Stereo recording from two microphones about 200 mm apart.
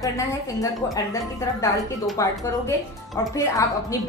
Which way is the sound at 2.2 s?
15° left (ahead or behind).